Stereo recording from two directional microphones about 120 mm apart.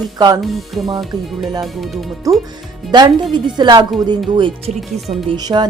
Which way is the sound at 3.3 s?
40° right (ahead or behind).